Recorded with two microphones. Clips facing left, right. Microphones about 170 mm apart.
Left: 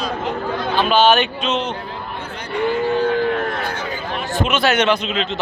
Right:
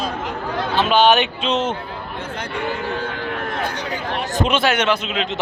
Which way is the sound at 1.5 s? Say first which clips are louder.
Right 4 dB; 45° right (ahead or behind).